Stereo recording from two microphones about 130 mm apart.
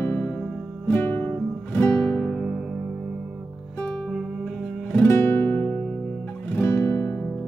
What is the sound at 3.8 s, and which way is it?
Music, 5° left (ahead or behind).